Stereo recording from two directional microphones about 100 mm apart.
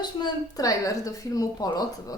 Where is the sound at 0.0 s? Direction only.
45° left (ahead or behind).